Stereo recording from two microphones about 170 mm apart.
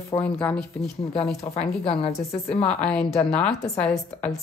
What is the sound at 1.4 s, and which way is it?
Speech, 35° left (ahead or behind).